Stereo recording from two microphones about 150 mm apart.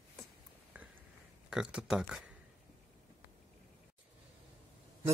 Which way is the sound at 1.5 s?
5° right (ahead or behind).